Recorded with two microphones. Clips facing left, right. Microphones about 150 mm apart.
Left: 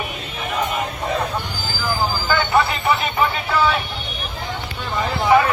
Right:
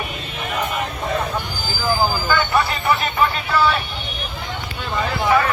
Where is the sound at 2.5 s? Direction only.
25° left (ahead or behind).